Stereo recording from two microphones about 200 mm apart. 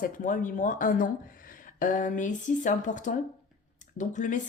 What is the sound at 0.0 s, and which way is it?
Speech, 40° left (ahead or behind).